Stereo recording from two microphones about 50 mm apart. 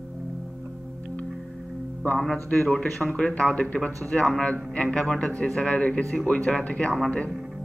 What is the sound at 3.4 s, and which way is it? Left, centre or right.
Speech, left.